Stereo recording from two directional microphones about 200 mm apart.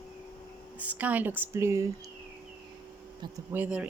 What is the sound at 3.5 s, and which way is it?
Speech, 10° right (ahead or behind).